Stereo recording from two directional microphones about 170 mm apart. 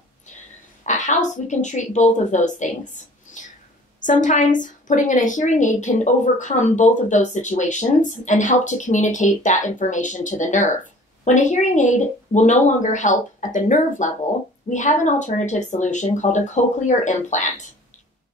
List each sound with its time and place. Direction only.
0.8 s a woman's voice: 45° left (ahead or behind)
3.3 s a sound: 50° left (ahead or behind)
4.0 s a woman's voice: 50° left (ahead or behind)